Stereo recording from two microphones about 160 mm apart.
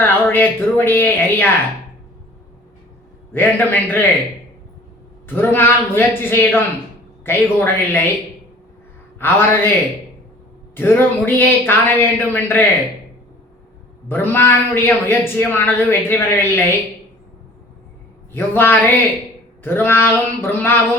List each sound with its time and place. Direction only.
0.0 s a man's voice: 15° left (ahead or behind)
3.3 s a man's voice: 10° left (ahead or behind)
5.3 s a man's voice: 15° left (ahead or behind)
9.1 s a man's voice: 15° left (ahead or behind)
10.8 s a man's voice: 15° left (ahead or behind)
14.1 s a man's voice: 10° left (ahead or behind)
18.3 s a man's voice: 15° left (ahead or behind)